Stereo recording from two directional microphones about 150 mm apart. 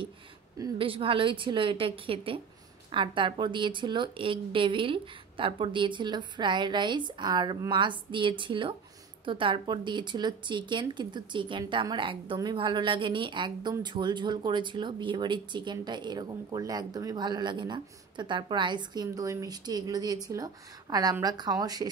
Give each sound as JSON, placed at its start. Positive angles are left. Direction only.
{"t": 0.7, "sound": "speech", "side_deg": -35}
{"t": 19.0, "sound": "speech", "side_deg": -20}